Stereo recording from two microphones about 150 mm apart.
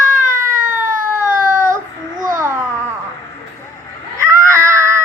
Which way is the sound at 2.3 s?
20° right (ahead or behind).